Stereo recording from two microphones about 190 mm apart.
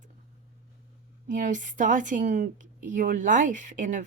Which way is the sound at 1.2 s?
45° right (ahead or behind).